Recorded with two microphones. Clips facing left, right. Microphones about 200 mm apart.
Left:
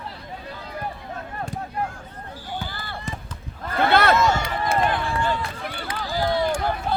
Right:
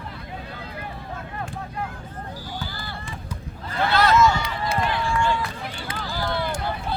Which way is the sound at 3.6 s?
60° left (ahead or behind).